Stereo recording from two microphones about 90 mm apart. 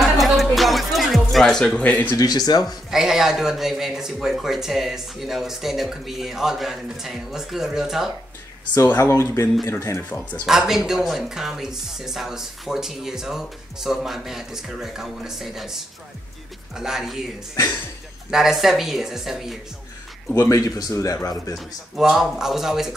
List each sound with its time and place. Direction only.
0.0 s music: centre (ahead or behind); by 2.1 s 15° left (ahead or behind)
2.1 s speech: 45° left (ahead or behind)
2.9 s a woman's voice: 5° right (ahead or behind)
8.8 s speech: 30° left (ahead or behind)
10.4 s a woman's voice: 5° right (ahead or behind)
18.3 s a woman's voice: 5° right (ahead or behind)
20.3 s speech: 35° left (ahead or behind)
21.5 s a woman's voice: 5° right (ahead or behind)